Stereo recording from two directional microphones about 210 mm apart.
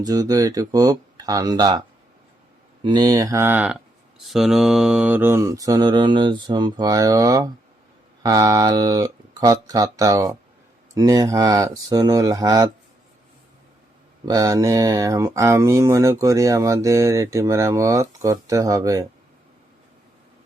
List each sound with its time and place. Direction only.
0.0 s speech: 15° right (ahead or behind)
2.8 s speech: 20° right (ahead or behind)
14.3 s speech: 15° right (ahead or behind)